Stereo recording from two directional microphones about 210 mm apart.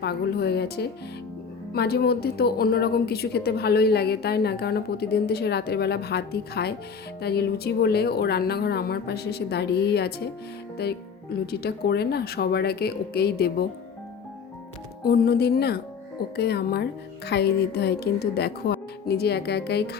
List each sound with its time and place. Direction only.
0.0 s a woman's voice: 50° left (ahead or behind)
15.0 s a woman's voice: 50° left (ahead or behind)